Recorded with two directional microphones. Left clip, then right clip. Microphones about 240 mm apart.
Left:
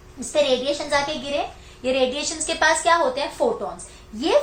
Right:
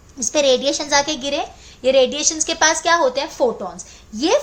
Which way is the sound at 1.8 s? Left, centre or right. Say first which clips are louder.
Right 6 dB; right.